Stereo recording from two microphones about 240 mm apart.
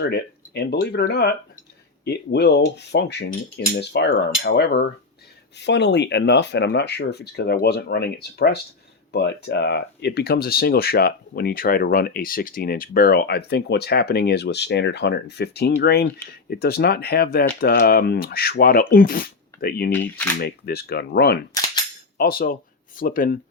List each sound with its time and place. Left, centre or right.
0.0 s speech: left
19.9 s speech: centre
20.4 s speech: left